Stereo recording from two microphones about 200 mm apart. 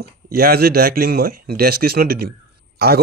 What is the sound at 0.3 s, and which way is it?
A man's voice, 50° right (ahead or behind).